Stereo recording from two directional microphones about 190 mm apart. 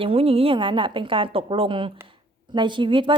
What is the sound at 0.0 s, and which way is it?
A woman's voice, 30° right (ahead or behind).